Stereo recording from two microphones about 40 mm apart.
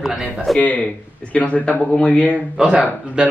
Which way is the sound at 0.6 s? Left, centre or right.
Left.